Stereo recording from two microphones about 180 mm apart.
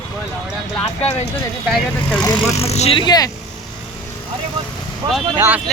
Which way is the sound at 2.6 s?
35° left (ahead or behind).